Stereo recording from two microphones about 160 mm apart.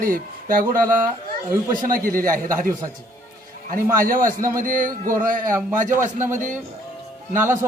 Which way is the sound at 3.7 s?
60° right (ahead or behind).